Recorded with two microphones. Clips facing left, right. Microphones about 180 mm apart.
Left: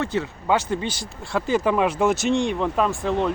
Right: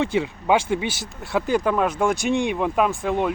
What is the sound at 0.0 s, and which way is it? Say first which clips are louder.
Speech: right 3 dB; 15° right (ahead or behind).